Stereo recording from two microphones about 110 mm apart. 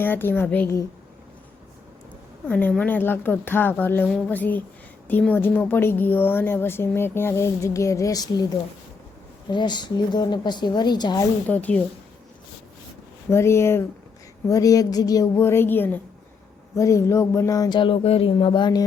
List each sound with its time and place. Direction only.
0.0 s a woman's voice: 20° left (ahead or behind)
2.5 s a woman's voice: 15° left (ahead or behind); by 8.4 s 35° left (ahead or behind)
9.5 s a woman's voice: 45° left (ahead or behind)
11.4 s a woman's voice: 15° left (ahead or behind)
13.3 s a woman's voice: 25° left (ahead or behind)
17.7 s speech: 55° left (ahead or behind)
18.3 s speech: 45° left (ahead or behind)